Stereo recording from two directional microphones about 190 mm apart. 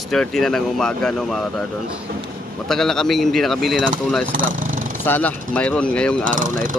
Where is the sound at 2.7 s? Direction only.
Centre (ahead or behind).